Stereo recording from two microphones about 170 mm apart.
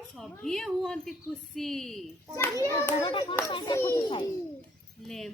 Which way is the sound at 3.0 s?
30° left (ahead or behind).